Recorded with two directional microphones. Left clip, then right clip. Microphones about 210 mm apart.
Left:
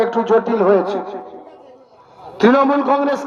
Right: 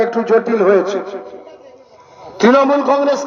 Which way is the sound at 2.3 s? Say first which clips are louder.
Right 2 dB; 35° right (ahead or behind).